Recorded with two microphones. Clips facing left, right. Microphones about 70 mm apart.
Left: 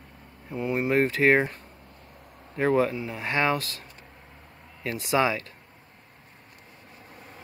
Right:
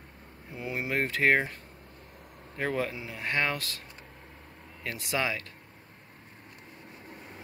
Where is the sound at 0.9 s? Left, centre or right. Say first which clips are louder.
Left 4 dB; centre.